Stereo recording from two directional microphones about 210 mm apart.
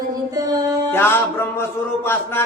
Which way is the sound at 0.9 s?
10° left (ahead or behind).